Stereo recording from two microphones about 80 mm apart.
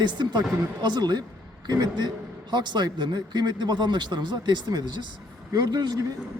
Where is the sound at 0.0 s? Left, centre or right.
Right.